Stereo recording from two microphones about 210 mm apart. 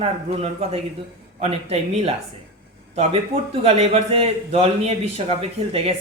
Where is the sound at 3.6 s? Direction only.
30° right (ahead or behind).